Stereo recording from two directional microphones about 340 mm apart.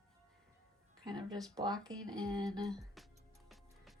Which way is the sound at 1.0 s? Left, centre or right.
Centre.